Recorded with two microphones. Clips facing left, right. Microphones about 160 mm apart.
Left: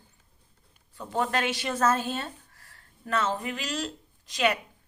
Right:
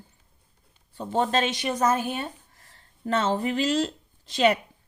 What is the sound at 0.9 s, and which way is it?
A woman's voice, 30° right (ahead or behind).